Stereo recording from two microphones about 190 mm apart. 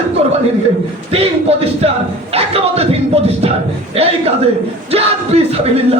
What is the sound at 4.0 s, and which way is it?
Speech, 30° right (ahead or behind).